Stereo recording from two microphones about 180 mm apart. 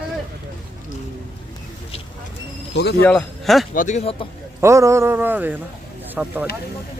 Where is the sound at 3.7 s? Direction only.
45° left (ahead or behind).